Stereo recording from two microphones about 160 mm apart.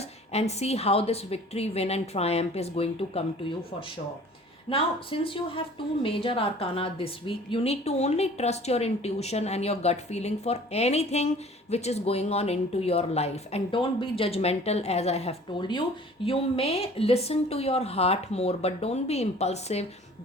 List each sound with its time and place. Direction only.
0.3 s a woman's voice: 40° left (ahead or behind)
4.7 s a woman's voice: 35° left (ahead or behind)